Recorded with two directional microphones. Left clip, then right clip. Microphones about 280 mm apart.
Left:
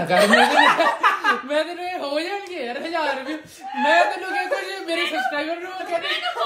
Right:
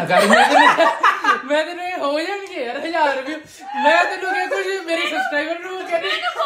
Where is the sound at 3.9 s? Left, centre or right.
Right.